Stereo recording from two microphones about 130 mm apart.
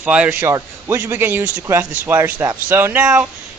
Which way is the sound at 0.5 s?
25° right (ahead or behind).